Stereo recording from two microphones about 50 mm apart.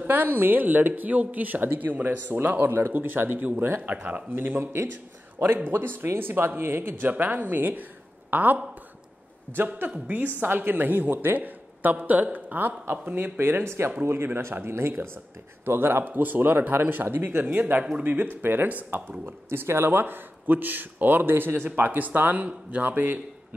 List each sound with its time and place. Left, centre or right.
0.0 s speech: right
3.8 s speech: right
4.3 s speech: right
9.8 s speech: right
13.7 s speech: right